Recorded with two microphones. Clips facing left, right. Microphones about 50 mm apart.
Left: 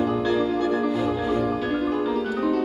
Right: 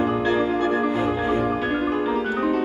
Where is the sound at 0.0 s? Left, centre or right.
Right.